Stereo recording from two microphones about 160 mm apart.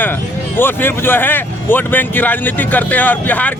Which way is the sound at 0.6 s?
15° left (ahead or behind).